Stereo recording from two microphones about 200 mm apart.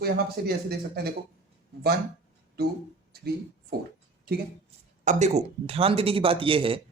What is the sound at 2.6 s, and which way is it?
Speech, 50° right (ahead or behind).